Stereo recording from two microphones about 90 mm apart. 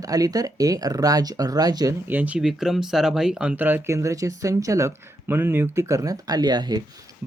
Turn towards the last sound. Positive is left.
turn(degrees=-50)  # may be behind; listen again after turning